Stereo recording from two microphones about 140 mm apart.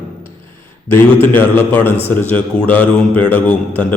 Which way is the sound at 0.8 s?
15° left (ahead or behind).